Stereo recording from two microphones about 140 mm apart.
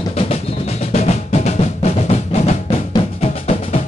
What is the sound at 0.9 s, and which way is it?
Drum, 50° left (ahead or behind).